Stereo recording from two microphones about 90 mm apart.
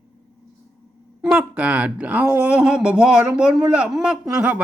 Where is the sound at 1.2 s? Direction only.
10° right (ahead or behind).